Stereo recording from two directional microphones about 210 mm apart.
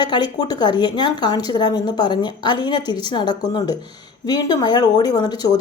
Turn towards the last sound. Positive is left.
turn(degrees=20)  # may be behind; listen again after turning